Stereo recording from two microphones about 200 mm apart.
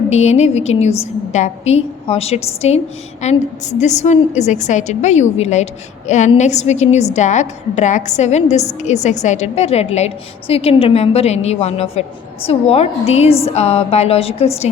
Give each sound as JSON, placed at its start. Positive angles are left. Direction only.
{"t": 0.1, "sound": "a woman's voice", "side_deg": 35}